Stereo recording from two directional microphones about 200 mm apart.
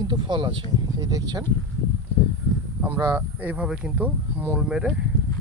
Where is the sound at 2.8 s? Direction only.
10° right (ahead or behind).